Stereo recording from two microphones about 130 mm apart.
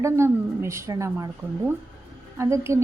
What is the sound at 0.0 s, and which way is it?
A woman's voice, 20° right (ahead or behind).